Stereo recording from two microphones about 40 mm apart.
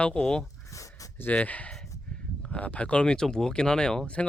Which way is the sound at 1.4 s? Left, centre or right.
Left.